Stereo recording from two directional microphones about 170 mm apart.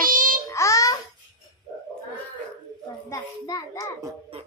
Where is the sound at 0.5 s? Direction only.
20° left (ahead or behind).